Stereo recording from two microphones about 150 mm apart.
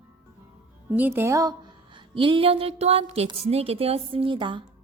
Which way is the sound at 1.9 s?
35° right (ahead or behind).